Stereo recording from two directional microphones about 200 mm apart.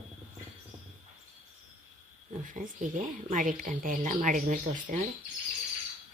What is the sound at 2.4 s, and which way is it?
A woman's voice, 40° right (ahead or behind).